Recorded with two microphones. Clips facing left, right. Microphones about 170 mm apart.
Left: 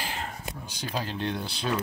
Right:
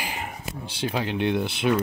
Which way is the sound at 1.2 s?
20° right (ahead or behind).